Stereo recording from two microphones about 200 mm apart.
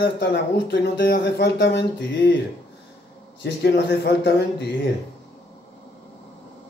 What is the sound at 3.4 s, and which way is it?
Speech, 55° left (ahead or behind).